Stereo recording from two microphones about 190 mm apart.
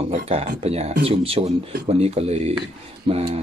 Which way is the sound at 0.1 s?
35° right (ahead or behind).